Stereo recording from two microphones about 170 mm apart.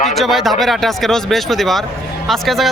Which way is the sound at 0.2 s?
Centre (ahead or behind).